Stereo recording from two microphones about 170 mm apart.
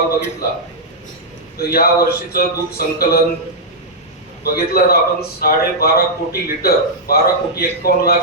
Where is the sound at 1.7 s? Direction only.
65° left (ahead or behind).